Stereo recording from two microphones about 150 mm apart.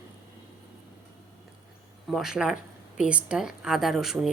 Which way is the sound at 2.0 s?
Centre (ahead or behind).